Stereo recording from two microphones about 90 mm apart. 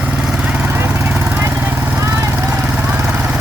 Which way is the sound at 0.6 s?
25° right (ahead or behind).